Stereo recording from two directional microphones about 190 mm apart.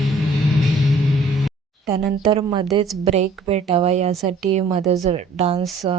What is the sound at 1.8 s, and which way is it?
A woman's voice, 25° right (ahead or behind).